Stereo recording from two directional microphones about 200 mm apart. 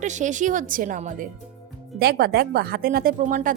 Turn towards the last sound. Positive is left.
turn(degrees=-45)  # may be behind; listen again after turning